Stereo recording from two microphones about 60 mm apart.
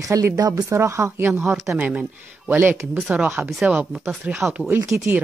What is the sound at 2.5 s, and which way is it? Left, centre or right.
Speech, right.